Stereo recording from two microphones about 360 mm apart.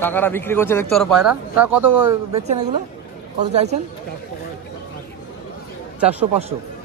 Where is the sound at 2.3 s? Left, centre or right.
Centre.